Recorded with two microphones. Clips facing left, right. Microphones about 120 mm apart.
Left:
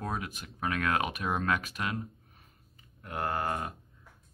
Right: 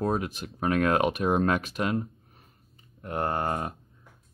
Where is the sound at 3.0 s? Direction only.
30° right (ahead or behind).